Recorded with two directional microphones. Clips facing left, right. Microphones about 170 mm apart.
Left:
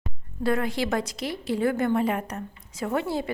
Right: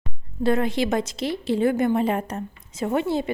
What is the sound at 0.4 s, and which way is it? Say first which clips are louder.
A woman's voice: right 4 dB; 25° right (ahead or behind).